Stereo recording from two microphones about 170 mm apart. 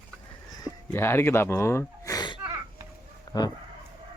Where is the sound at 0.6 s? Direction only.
15° left (ahead or behind).